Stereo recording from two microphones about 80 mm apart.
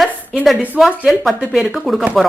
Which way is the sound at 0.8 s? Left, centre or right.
Centre.